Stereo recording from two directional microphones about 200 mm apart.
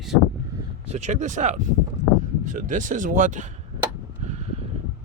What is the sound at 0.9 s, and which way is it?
Speech, 35° right (ahead or behind).